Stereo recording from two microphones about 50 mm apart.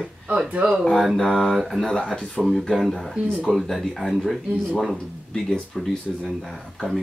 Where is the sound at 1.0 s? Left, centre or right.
Centre.